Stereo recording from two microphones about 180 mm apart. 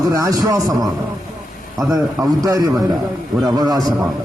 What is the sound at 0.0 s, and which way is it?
A man's voice, 20° right (ahead or behind).